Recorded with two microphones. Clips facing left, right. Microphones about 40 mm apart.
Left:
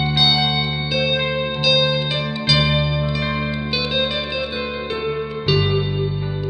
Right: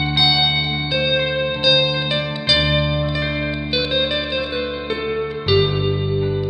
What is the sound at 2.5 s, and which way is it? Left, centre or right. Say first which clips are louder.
Music: right 1 dB; centre.